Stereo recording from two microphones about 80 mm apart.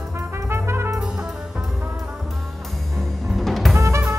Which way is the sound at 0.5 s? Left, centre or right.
Right.